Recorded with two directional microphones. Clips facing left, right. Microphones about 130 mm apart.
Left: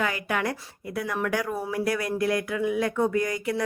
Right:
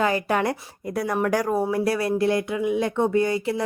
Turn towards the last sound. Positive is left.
turn(degrees=-30)  # may be behind; listen again after turning